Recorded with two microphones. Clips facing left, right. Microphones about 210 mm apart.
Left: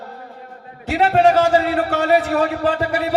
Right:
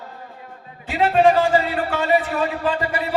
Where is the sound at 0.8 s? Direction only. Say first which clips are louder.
Left 1 dB; 70° left (ahead or behind).